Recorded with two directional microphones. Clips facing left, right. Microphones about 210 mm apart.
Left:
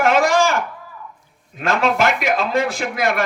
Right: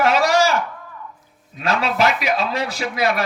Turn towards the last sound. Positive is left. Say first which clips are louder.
# left 1 dB
turn(degrees=50)  # may be behind; listen again after turning